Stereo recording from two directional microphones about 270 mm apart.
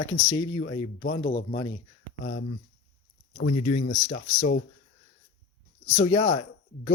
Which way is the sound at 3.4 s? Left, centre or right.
Left.